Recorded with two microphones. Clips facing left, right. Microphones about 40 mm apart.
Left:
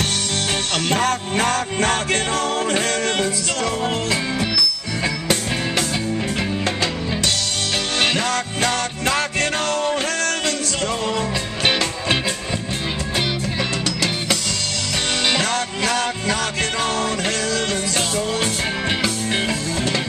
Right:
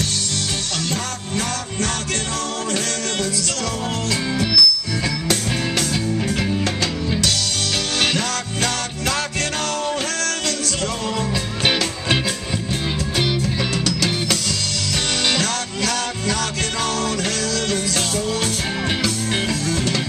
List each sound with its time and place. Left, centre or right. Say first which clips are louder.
0.8 s music: left 6 dB; left
4.1 s music: right 1 dB; centre
8.6 s music: left 3 dB; centre
15.3 s music: left 2 dB; centre